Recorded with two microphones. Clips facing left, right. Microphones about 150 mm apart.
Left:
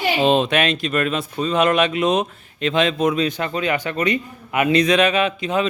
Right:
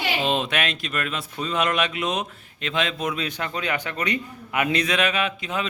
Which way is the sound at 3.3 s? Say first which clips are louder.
Left 6 dB; 20° left (ahead or behind).